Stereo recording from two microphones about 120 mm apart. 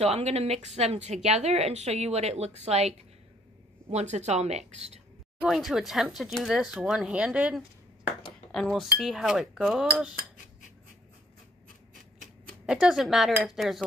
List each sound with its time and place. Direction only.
0.0 s a woman's voice: 60° right (ahead or behind)
3.9 s a woman's voice: 70° right (ahead or behind)
5.4 s speech: centre (ahead or behind)
8.5 s speech: centre (ahead or behind)
12.6 s speech: 5° right (ahead or behind)